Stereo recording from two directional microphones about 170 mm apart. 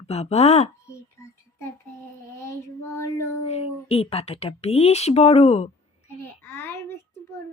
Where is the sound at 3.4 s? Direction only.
35° left (ahead or behind).